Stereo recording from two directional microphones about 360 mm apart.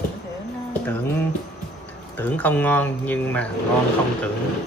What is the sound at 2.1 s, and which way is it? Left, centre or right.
Speech, centre.